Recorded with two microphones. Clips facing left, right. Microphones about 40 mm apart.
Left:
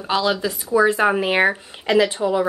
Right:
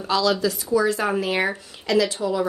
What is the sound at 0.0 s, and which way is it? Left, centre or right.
Speech, left.